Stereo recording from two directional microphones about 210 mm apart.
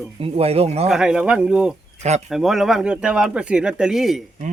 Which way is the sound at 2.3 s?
Centre (ahead or behind).